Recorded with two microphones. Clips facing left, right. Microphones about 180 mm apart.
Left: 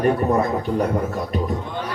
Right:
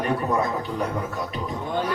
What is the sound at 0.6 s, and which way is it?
Speech, 50° left (ahead or behind).